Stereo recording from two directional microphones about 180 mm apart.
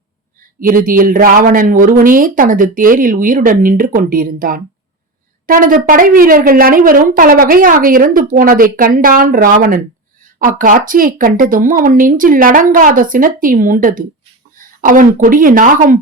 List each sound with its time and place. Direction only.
0.6 s a woman's voice: 50° right (ahead or behind)